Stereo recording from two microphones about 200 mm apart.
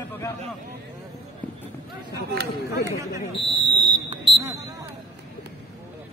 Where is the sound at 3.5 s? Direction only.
25° right (ahead or behind).